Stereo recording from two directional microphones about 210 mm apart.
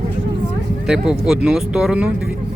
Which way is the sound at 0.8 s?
5° right (ahead or behind).